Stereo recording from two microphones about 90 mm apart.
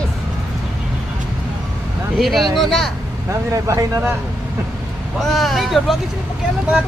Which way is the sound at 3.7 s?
35° right (ahead or behind).